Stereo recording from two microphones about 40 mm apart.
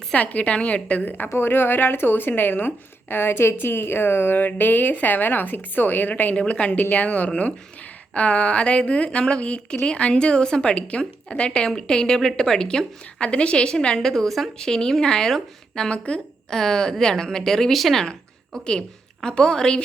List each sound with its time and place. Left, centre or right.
0.1 s a woman's voice: left
1.3 s speech: left
4.4 s a woman's voice: left
6.3 s a woman's voice: left
6.9 s a woman's voice: left; by 14.1 s centre
14.1 s a woman's voice: centre
14.6 s speech: centre
16.6 s speech: centre
18.6 s a woman's voice: centre